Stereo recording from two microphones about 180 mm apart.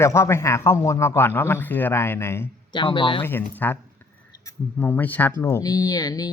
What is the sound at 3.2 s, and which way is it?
Speech, 10° left (ahead or behind).